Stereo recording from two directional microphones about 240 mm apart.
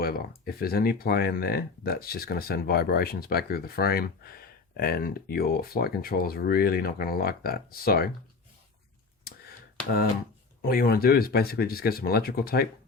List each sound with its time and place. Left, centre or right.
0.0 s speech: left
9.3 s clicking: left
10.6 s speech: left